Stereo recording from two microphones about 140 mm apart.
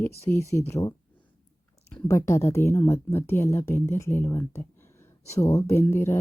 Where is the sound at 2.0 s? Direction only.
20° left (ahead or behind).